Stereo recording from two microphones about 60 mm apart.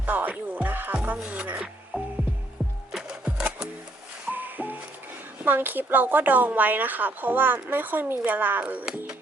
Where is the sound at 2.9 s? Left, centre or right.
Centre.